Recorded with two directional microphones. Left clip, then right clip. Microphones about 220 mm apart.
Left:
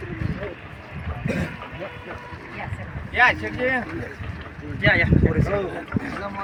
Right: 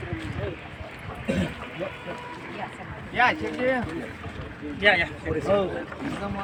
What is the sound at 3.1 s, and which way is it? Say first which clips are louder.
Speech: left 4 dB; 30° left (ahead or behind).